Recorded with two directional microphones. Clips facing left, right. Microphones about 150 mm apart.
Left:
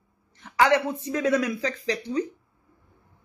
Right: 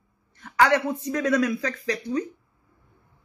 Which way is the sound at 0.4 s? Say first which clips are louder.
Even; 20° left (ahead or behind).